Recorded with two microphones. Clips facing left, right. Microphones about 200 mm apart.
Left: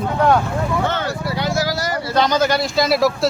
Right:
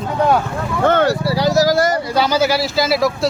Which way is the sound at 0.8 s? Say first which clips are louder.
Right 8 dB; 55° right (ahead or behind).